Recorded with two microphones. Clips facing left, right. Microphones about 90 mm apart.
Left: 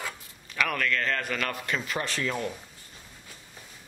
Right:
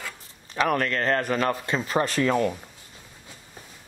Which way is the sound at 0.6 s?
35° right (ahead or behind).